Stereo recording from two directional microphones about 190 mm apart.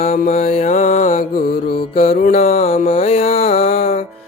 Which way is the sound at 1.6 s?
30° left (ahead or behind).